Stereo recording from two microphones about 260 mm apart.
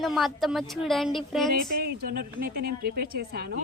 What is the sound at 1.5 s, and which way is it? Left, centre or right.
Speech, right.